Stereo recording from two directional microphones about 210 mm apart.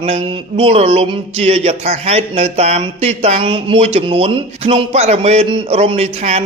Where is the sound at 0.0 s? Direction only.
25° right (ahead or behind).